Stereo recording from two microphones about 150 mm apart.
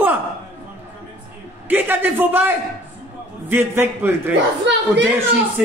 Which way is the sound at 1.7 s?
15° right (ahead or behind).